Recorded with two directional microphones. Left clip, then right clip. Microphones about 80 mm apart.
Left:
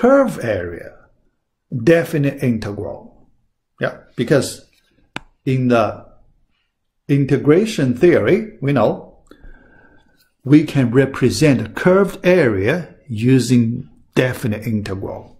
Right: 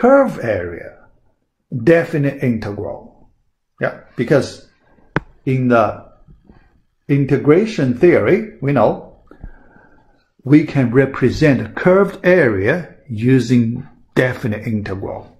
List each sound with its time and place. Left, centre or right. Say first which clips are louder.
0.0 s speech: right 2 dB; left
4.1 s speech: right 1 dB; left
7.2 s speech: right 1 dB; left
7.4 s speech: right 1 dB; left
10.5 s speech: right 1 dB; left